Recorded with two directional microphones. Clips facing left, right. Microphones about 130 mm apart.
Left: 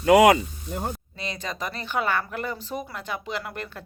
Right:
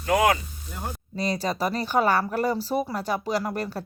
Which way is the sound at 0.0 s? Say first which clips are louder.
Left 6 dB; 90° left.